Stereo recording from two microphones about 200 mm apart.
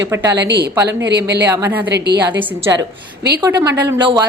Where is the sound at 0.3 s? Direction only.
60° right (ahead or behind).